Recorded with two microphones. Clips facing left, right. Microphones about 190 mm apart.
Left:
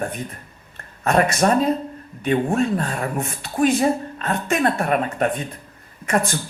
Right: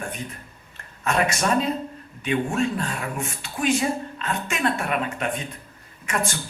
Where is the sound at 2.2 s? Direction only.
40° left (ahead or behind).